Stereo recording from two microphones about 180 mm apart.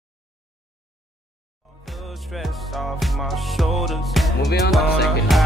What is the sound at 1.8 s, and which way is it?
Music, centre (ahead or behind).